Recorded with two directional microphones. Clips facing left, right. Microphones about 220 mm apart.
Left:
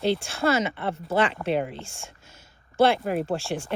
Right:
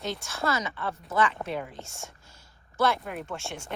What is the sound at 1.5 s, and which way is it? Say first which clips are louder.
Speech: left 8 dB; 70° left (ahead or behind).